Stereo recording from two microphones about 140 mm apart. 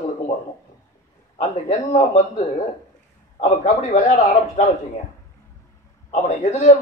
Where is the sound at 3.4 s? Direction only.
55° left (ahead or behind).